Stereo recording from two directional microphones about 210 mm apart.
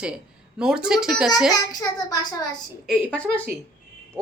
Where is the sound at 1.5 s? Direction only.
20° left (ahead or behind).